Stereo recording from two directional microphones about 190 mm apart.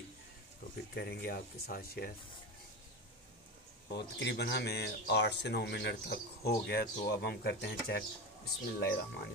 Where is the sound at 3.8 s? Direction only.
60° left (ahead or behind).